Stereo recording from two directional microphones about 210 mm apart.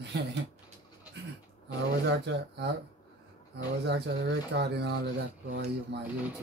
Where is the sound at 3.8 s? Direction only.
55° right (ahead or behind).